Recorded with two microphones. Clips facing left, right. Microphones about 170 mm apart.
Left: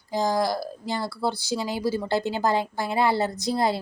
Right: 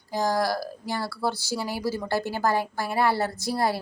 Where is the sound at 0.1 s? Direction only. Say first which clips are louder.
Left 1 dB; 15° left (ahead or behind).